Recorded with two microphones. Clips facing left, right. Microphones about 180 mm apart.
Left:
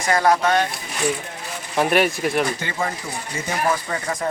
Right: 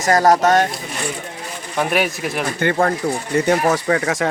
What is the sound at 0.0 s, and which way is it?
Speech, 40° right (ahead or behind).